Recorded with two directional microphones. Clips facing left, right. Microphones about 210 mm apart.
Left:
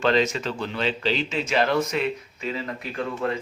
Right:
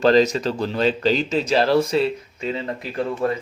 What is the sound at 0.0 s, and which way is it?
Speech, 35° right (ahead or behind).